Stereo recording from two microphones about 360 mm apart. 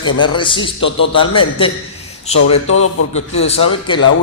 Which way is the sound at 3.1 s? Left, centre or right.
Centre.